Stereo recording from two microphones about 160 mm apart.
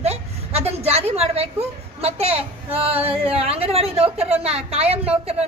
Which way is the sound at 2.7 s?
40° right (ahead or behind).